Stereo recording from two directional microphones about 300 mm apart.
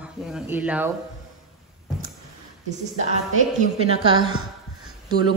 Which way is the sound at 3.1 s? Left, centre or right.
Right.